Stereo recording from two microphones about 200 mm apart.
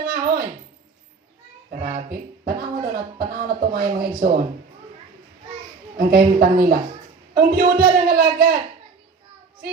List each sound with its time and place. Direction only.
0.0 s speech: 45° right (ahead or behind)
1.7 s a man's voice: 45° right (ahead or behind)
6.0 s a man's voice: 45° right (ahead or behind)